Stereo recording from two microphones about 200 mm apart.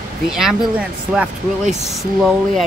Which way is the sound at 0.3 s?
Centre (ahead or behind).